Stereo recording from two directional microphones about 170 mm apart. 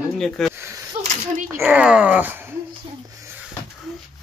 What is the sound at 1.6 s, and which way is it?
Speech, 10° right (ahead or behind).